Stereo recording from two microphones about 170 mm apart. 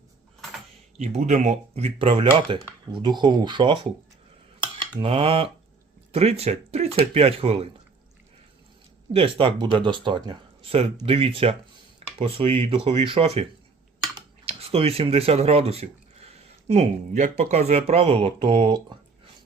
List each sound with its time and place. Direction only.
0.9 s speech: 40° right (ahead or behind)
4.6 s a sound: 25° right (ahead or behind)
6.1 s speech: 35° right (ahead or behind)
9.1 s speech: 30° right (ahead or behind)